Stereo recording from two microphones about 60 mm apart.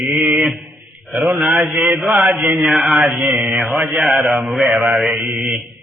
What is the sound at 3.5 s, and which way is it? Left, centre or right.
Mantra, right.